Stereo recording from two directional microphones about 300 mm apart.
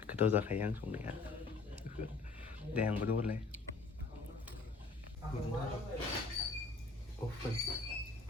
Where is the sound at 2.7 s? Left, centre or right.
Centre.